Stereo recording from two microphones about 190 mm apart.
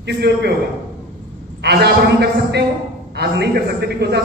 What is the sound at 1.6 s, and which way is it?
A man's voice, 60° right (ahead or behind).